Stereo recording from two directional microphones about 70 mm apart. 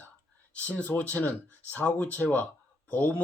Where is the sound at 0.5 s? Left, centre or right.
Left.